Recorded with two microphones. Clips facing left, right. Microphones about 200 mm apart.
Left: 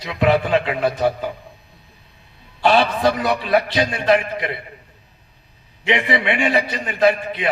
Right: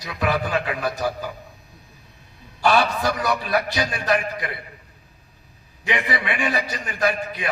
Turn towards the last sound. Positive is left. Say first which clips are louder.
# left 6 dB
turn(degrees=25)  # may be behind; listen again after turning